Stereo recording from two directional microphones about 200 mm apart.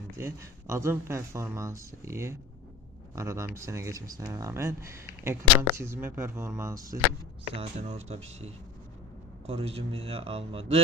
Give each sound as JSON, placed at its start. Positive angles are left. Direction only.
{"t": 0.2, "sound": "speech", "side_deg": -15}
{"t": 7.5, "sound": "speech", "side_deg": -30}
{"t": 9.5, "sound": "speech", "side_deg": -30}